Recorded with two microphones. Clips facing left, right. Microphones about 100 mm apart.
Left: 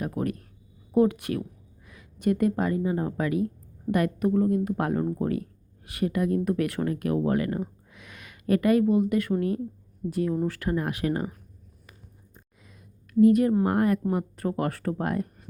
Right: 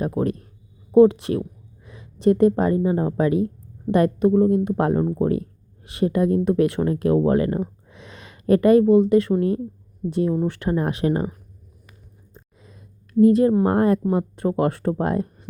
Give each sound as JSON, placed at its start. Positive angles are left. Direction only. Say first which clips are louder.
{"t": 0.2, "sound": "a woman's voice", "louder": "right 6 dB", "side_deg": -25}
{"t": 13.1, "sound": "speech", "louder": "right 4 dB", "side_deg": -30}